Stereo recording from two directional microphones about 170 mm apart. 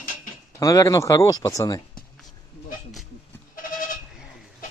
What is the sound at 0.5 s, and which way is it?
Speech, 20° left (ahead or behind).